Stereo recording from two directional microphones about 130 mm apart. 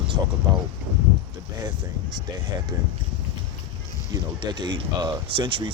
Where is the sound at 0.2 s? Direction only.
20° right (ahead or behind).